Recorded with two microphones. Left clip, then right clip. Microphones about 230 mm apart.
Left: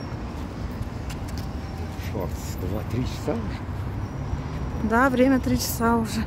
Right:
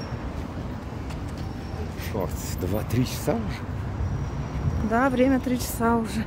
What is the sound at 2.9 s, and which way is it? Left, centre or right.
Speech, right.